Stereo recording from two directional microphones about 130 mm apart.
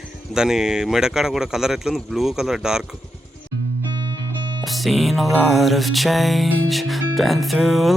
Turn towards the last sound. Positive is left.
turn(degrees=0)  # may be behind; listen again after turning